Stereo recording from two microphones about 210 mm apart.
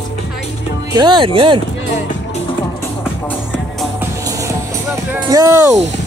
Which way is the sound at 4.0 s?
15° right (ahead or behind).